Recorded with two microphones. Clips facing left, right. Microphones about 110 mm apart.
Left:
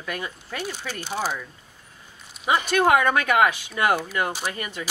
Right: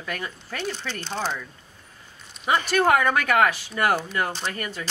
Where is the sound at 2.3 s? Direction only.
5° left (ahead or behind).